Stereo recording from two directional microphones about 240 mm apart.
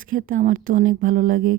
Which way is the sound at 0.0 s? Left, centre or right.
Right.